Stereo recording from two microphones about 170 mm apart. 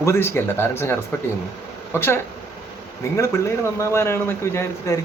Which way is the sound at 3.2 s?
15° left (ahead or behind).